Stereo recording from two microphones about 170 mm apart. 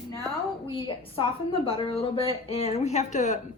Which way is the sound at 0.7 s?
30° left (ahead or behind).